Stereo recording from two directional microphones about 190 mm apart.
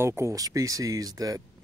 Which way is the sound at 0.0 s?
15° right (ahead or behind).